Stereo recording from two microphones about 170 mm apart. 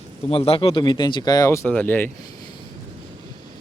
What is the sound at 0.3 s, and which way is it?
Speech, 35° left (ahead or behind).